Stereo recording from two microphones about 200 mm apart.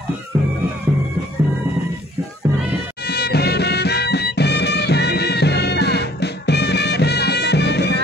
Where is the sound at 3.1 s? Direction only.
55° left (ahead or behind).